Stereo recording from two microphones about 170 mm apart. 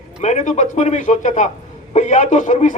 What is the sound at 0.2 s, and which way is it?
A man's voice, 45° left (ahead or behind).